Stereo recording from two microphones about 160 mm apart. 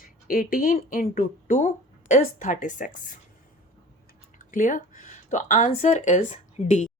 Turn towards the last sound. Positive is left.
turn(degrees=45)  # may be behind; listen again after turning